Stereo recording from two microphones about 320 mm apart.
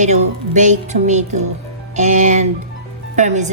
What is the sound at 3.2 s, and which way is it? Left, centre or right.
Speech, right.